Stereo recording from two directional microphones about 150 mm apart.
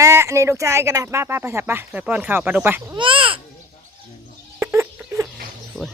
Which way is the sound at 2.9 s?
35° right (ahead or behind).